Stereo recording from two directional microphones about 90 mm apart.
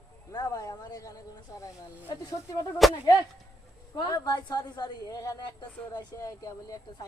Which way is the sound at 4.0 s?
50° left (ahead or behind).